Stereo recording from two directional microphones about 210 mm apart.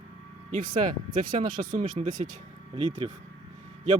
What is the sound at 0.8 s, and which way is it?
A man's voice, 40° right (ahead or behind).